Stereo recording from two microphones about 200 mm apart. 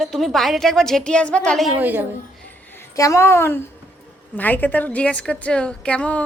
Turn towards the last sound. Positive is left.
turn(degrees=5)  # may be behind; listen again after turning